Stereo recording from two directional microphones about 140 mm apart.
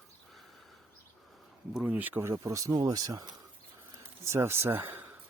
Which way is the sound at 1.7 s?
10° right (ahead or behind).